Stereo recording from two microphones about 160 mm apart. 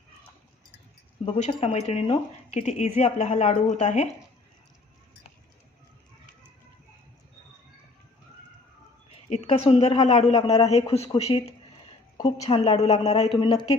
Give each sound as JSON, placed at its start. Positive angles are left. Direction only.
{"t": 1.2, "sound": "a woman's voice", "side_deg": 35}
{"t": 9.3, "sound": "a woman's voice", "side_deg": 40}